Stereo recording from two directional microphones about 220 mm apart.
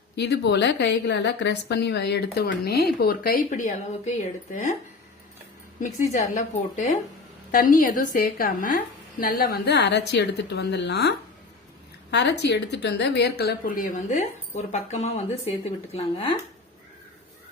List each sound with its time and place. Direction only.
0.2 s a woman's voice: 50° left (ahead or behind)
5.8 s a woman's voice: 35° left (ahead or behind)
12.1 s a woman's voice: 50° left (ahead or behind); by 16.4 s 25° left (ahead or behind)